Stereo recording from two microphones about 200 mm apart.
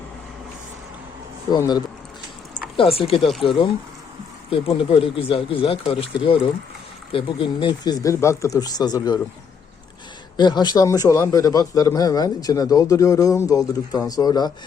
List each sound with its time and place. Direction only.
1.5 s speech: 20° left (ahead or behind)
10.3 s a man's voice: 20° left (ahead or behind)